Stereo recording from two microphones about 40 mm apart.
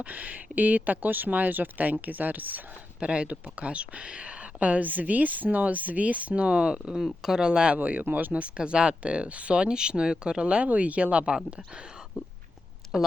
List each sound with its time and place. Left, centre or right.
0.0 s speech: right
3.0 s speech: right
7.2 s speech: centre
7.8 s speech: right
8.5 s speech: right
10.7 s speech: right
12.8 s a sound: centre